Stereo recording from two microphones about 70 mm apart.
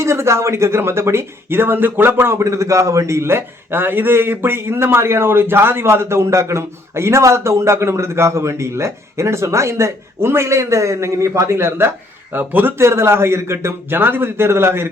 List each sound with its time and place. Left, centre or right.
0.0 s a man's voice: right
2.4 s a man's voice: right